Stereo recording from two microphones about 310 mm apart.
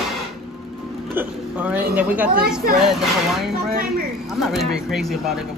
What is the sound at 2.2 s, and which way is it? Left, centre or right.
Speech, right.